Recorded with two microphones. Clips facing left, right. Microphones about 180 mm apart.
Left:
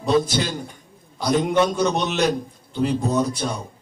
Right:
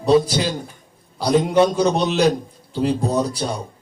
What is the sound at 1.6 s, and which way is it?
A man's voice, 30° right (ahead or behind).